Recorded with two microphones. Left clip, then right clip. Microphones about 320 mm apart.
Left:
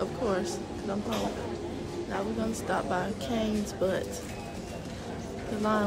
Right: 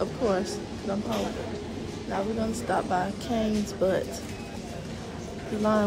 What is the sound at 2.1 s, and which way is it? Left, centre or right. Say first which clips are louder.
Speech: right 4 dB; centre.